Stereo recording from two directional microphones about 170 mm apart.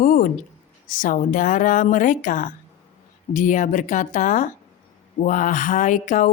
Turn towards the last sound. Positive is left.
turn(degrees=50)  # may be behind; listen again after turning